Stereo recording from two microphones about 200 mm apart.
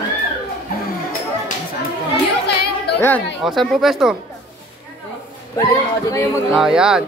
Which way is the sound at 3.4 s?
Centre (ahead or behind).